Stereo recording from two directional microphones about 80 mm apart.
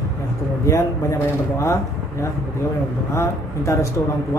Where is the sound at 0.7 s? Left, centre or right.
Left.